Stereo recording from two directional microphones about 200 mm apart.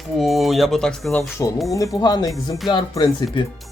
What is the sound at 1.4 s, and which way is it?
Speech, 15° left (ahead or behind).